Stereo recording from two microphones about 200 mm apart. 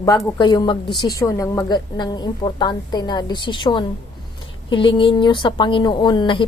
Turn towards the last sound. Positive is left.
turn(degrees=25)  # may be behind; listen again after turning